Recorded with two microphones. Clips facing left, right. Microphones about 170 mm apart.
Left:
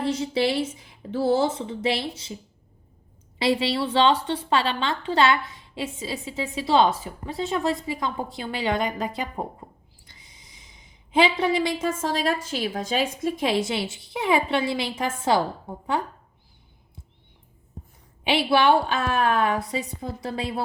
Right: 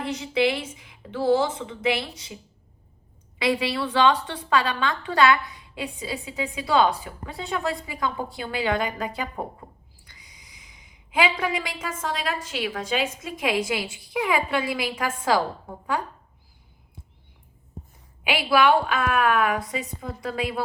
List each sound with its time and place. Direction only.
0.0 s a woman's voice: 30° left (ahead or behind)
18.2 s a woman's voice: 30° left (ahead or behind)